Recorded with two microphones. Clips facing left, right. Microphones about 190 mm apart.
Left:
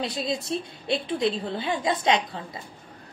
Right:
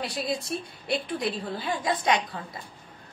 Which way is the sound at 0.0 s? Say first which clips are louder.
Left 2 dB; 20° left (ahead or behind).